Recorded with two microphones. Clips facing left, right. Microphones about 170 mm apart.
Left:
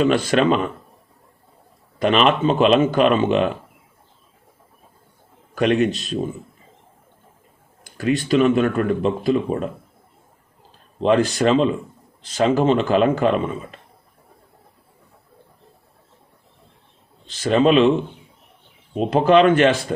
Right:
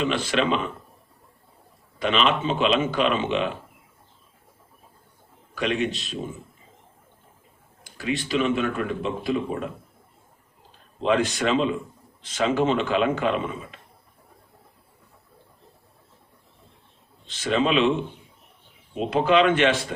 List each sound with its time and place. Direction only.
0.0 s speech: 45° left (ahead or behind)
2.0 s speech: 50° left (ahead or behind)
5.5 s speech: 50° left (ahead or behind)
7.9 s speech: 45° left (ahead or behind)
11.0 s speech: 35° left (ahead or behind)
17.2 s speech: 40° left (ahead or behind)
18.9 s speech: 40° left (ahead or behind)